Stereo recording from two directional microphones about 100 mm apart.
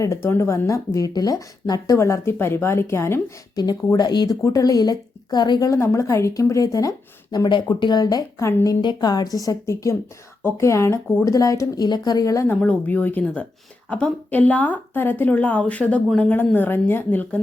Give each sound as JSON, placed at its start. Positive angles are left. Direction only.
{"t": 0.0, "sound": "speech", "side_deg": 25}
{"t": 3.5, "sound": "a woman's voice", "side_deg": 45}
{"t": 8.8, "sound": "a woman's voice", "side_deg": 45}
{"t": 12.5, "sound": "a woman's voice", "side_deg": 15}